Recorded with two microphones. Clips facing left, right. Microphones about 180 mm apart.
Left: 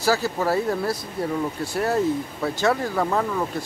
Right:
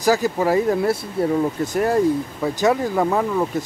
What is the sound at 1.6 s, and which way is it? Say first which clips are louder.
Speech: right 3 dB; 15° right (ahead or behind).